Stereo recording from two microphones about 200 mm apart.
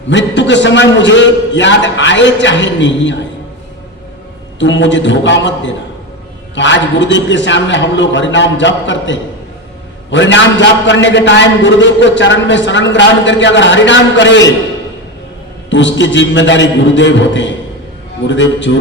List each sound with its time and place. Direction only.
0.1 s a man's voice: 65° left (ahead or behind)
4.6 s a man's voice: 65° left (ahead or behind)
15.7 s a man's voice: 65° left (ahead or behind)